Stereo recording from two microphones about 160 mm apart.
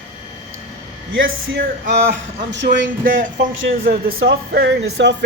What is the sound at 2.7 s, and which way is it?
Speech, 55° right (ahead or behind).